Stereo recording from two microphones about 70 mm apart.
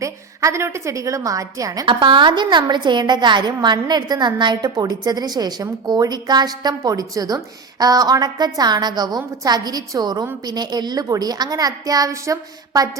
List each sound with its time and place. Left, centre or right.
0.0 s a woman's voice: right